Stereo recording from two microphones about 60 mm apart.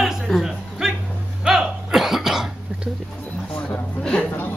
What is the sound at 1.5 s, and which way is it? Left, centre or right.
Cough, centre.